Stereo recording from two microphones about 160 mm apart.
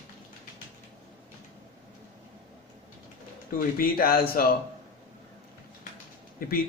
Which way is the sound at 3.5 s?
65° left (ahead or behind).